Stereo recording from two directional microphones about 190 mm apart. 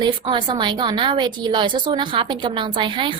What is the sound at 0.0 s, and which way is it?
A woman's voice, 25° right (ahead or behind).